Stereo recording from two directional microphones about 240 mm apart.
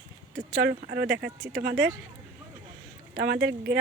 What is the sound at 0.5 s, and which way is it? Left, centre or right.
Speech, right.